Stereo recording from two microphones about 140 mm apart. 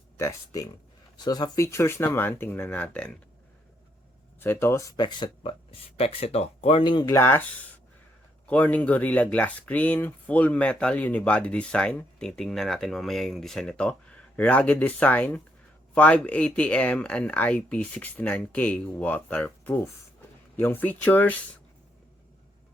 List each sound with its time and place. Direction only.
0.2 s speech: 25° left (ahead or behind)
4.4 s speech: 15° left (ahead or behind)
8.4 s speech: 10° left (ahead or behind)